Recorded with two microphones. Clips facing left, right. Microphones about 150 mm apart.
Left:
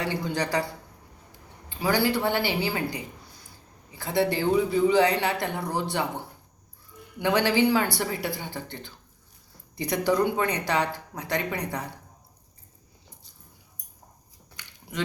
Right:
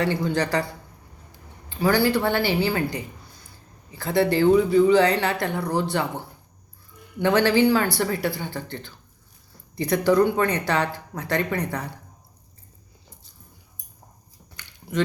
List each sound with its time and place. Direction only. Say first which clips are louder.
0.0 s speech: right 5 dB; 15° left (ahead or behind)
1.8 s speech: right 4 dB; 15° left (ahead or behind)
7.2 s speech: right 4 dB; 15° left (ahead or behind)
14.5 s a sound: right 8 dB; 10° left (ahead or behind)